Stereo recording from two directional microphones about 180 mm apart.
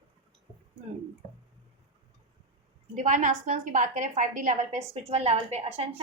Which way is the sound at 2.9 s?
45° right (ahead or behind).